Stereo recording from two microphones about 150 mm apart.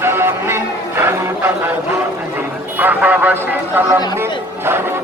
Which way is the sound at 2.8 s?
10° right (ahead or behind).